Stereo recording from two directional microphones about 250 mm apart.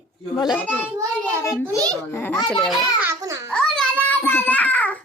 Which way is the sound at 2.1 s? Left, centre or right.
Centre.